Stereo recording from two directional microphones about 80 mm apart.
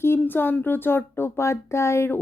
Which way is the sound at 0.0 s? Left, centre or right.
Left.